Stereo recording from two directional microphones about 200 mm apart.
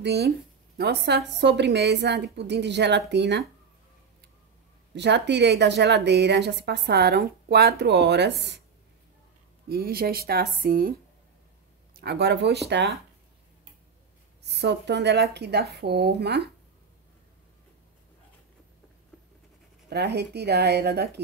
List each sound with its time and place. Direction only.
0.0 s a woman's voice: 55° right (ahead or behind)
4.9 s a woman's voice: 60° right (ahead or behind)
9.7 s speech: 50° right (ahead or behind)
12.0 s a woman's voice: 55° right (ahead or behind)
14.4 s a woman's voice: 60° right (ahead or behind)
19.9 s a woman's voice: 55° right (ahead or behind)